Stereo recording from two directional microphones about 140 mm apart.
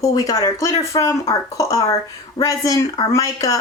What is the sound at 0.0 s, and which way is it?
Speech, 25° left (ahead or behind).